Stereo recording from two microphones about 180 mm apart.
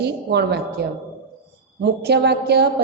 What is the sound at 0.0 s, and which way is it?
A woman's voice, 65° right (ahead or behind).